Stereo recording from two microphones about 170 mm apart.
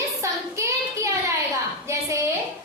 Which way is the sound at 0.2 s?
15° right (ahead or behind).